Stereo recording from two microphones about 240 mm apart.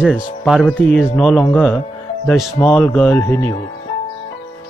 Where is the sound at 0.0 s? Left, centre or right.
Centre.